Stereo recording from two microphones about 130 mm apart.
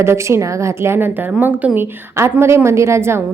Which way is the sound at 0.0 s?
20° right (ahead or behind).